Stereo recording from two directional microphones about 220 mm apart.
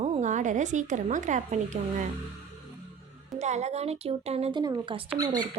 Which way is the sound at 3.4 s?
30° right (ahead or behind).